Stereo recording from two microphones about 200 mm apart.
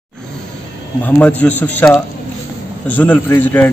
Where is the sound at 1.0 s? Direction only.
10° left (ahead or behind).